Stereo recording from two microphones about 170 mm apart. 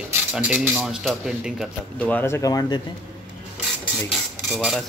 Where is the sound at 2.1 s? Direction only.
15° left (ahead or behind).